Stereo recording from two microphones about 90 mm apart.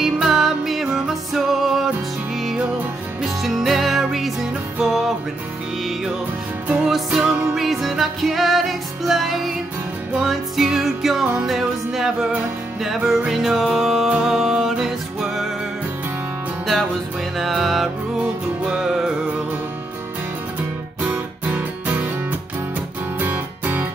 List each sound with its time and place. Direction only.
0.0 s music: 5° right (ahead or behind)
3.2 s music: 5° right (ahead or behind)
6.7 s music: 5° right (ahead or behind)
17.4 s music: centre (ahead or behind)
21.0 s music: 20° right (ahead or behind)
23.2 s music: 20° right (ahead or behind)